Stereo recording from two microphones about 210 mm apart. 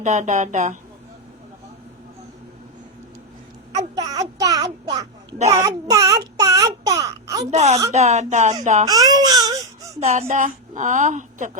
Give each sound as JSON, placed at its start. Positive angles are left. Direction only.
{"t": 0.0, "sound": "a woman's voice", "side_deg": -35}
{"t": 3.8, "sound": "a sound", "side_deg": -15}
{"t": 5.5, "sound": "child singing", "side_deg": -15}
{"t": 7.5, "sound": "a woman's voice", "side_deg": -30}
{"t": 8.9, "sound": "baby cry", "side_deg": -20}
{"t": 10.0, "sound": "a woman's voice", "side_deg": -35}